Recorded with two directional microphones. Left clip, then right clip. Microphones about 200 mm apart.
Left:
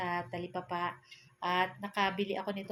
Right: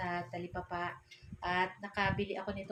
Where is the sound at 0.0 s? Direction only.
40° left (ahead or behind).